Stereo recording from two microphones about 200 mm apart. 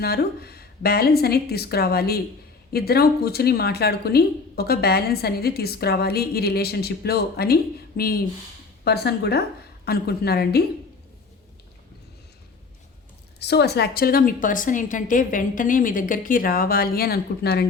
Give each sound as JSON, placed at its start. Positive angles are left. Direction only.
{"t": 0.0, "sound": "speech", "side_deg": 50}
{"t": 13.4, "sound": "speech", "side_deg": 55}